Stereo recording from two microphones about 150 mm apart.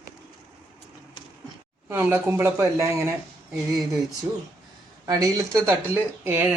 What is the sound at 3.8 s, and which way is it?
Speech, centre (ahead or behind).